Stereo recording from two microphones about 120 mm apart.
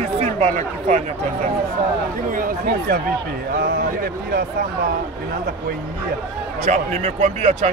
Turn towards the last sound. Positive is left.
turn(degrees=-70)  # may be behind; listen again after turning